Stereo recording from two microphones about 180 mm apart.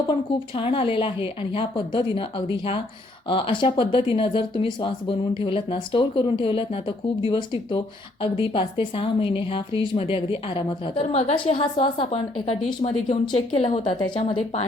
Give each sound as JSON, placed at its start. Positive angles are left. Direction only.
{"t": 0.1, "sound": "a woman's voice", "side_deg": 30}